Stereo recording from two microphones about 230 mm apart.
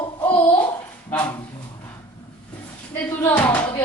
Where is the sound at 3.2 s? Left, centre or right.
Centre.